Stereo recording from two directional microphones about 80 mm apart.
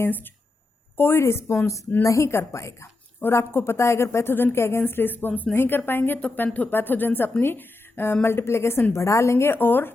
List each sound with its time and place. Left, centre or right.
0.0 s a woman's voice: left
3.2 s a woman's voice: left